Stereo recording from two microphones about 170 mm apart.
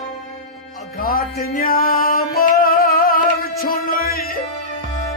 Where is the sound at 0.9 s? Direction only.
60° left (ahead or behind).